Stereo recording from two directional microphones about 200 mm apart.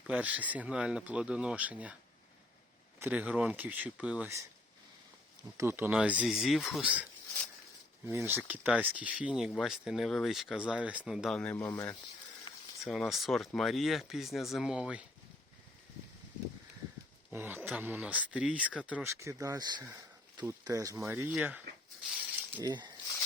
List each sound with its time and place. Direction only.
0.1 s speech: 5° right (ahead or behind)
3.0 s speech: 5° right (ahead or behind)
5.5 s speech: 10° right (ahead or behind)
8.0 s speech: 10° right (ahead or behind)
17.3 s speech: 10° right (ahead or behind)
22.5 s speech: 20° right (ahead or behind)